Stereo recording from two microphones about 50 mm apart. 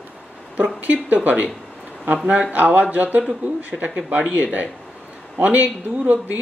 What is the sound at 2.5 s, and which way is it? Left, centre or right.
Speech, right.